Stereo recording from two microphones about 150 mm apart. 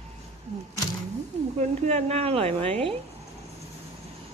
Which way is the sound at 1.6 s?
50° right (ahead or behind).